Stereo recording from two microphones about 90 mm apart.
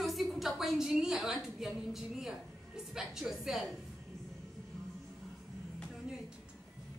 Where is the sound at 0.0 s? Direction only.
Centre (ahead or behind).